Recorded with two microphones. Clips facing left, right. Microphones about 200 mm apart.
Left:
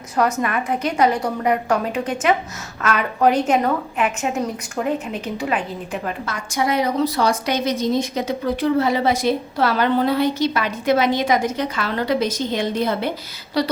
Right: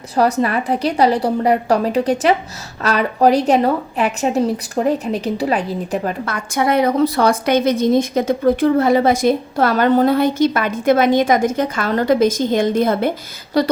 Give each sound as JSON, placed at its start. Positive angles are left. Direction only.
{"t": 0.2, "sound": "a woman's voice", "side_deg": -35}
{"t": 6.2, "sound": "a woman's voice", "side_deg": -60}